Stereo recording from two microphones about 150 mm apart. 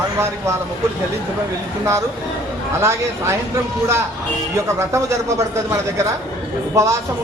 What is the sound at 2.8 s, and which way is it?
Speech, 15° right (ahead or behind).